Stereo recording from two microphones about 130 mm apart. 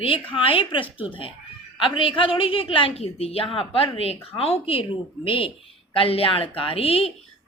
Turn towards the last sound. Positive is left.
turn(degrees=45)  # may be behind; listen again after turning